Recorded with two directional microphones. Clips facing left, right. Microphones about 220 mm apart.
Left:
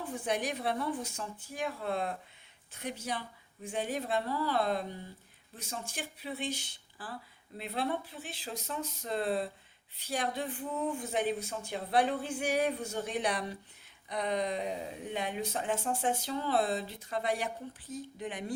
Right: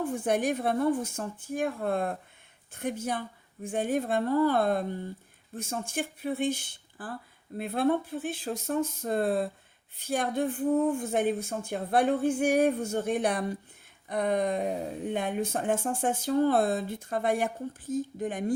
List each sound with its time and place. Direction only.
0.0 s speech: 50° right (ahead or behind)